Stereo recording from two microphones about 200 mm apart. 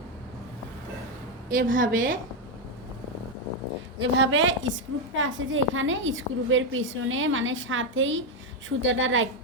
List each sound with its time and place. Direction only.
1.7 s a woman's voice: 45° right (ahead or behind)
3.9 s a woman's voice: 65° right (ahead or behind)